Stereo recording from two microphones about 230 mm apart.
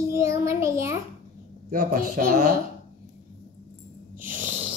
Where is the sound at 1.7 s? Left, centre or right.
Right.